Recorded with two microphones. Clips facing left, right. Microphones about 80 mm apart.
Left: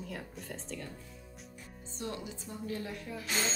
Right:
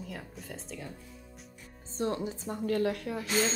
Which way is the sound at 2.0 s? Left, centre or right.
Right.